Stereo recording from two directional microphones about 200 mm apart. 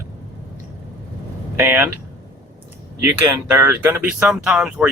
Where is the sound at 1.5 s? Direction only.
10° right (ahead or behind).